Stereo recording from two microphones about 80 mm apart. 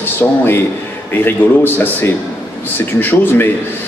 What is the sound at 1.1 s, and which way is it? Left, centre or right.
A man's voice, left.